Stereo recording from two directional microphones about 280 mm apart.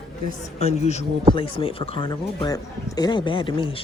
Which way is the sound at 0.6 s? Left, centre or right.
Left.